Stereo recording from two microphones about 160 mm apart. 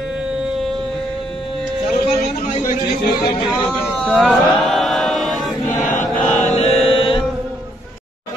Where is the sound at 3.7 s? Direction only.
5° left (ahead or behind).